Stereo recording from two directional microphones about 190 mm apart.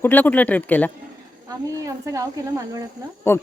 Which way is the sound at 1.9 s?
15° right (ahead or behind).